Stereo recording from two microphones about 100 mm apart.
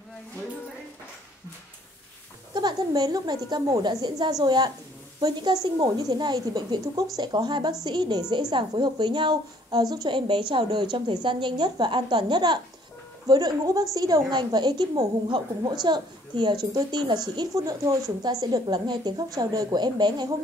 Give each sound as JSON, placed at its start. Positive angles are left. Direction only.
{"t": 2.5, "sound": "a woman's voice", "side_deg": -45}
{"t": 17.4, "sound": "a woman's voice", "side_deg": -35}